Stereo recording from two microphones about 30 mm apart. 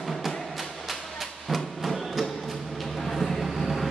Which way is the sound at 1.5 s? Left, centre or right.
Centre.